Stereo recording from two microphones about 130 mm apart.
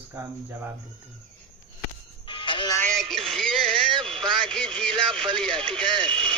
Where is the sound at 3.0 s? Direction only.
Centre (ahead or behind).